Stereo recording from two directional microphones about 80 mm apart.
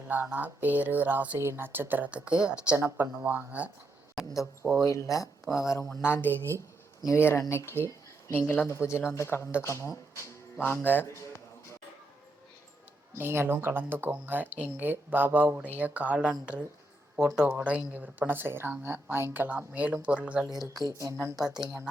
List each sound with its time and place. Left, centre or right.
0.1 s speech: right
1.4 s speech: right; by 2.7 s centre
2.7 s speech: right
3.2 s speech: centre
4.9 s speech: left
6.3 s a woman's voice: right
7.2 s speech: left
13.1 s speech: right
17.2 s speech: centre
20.5 s speech: centre
20.9 s a woman's voice: right
21.3 s speech: centre